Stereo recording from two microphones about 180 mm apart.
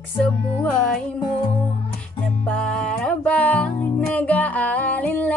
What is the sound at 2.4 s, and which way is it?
Music, 5° left (ahead or behind).